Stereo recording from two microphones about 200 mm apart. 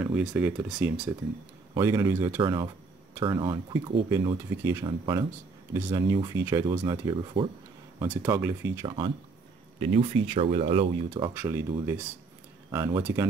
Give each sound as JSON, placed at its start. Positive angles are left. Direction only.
{"t": 0.0, "sound": "speech", "side_deg": -5}
{"t": 1.7, "sound": "speech", "side_deg": -15}
{"t": 8.0, "sound": "speech", "side_deg": -10}
{"t": 8.8, "sound": "speech", "side_deg": -25}
{"t": 11.3, "sound": "speech", "side_deg": -10}